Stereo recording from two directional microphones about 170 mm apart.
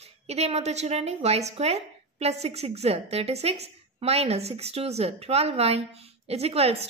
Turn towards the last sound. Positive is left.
turn(degrees=-35)  # may be behind; listen again after turning